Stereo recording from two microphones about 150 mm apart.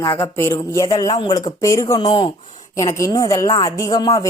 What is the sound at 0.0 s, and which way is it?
Speech, 15° left (ahead or behind).